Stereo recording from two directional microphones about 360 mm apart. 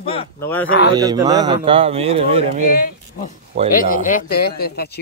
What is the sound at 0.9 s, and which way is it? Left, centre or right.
A man's voice, centre.